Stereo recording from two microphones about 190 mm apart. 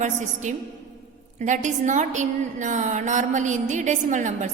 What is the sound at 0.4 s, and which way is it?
A woman's voice, 40° right (ahead or behind).